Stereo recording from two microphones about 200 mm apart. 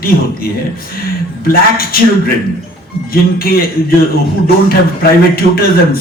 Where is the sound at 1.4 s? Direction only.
50° left (ahead or behind).